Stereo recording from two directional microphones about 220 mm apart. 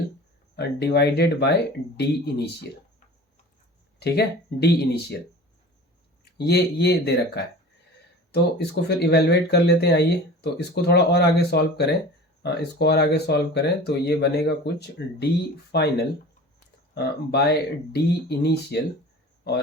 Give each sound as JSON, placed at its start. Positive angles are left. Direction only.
{"t": 0.5, "sound": "speech", "side_deg": 50}
{"t": 4.0, "sound": "speech", "side_deg": 50}
{"t": 6.2, "sound": "speech", "side_deg": 50}
{"t": 16.9, "sound": "speech", "side_deg": 50}